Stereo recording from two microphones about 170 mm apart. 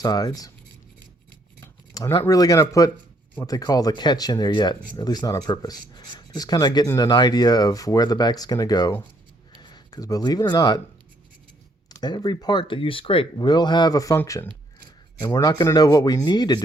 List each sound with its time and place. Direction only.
0.0 s speech: 20° left (ahead or behind)
1.6 s speech: 15° left (ahead or behind)
11.9 s speech: 25° left (ahead or behind)